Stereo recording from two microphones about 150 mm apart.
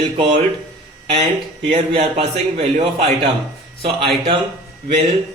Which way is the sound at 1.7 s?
40° right (ahead or behind).